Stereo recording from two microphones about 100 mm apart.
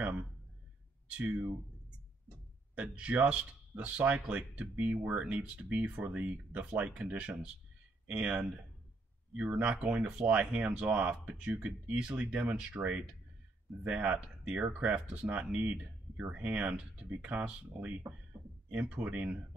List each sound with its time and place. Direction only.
2.2 s speech: 15° right (ahead or behind)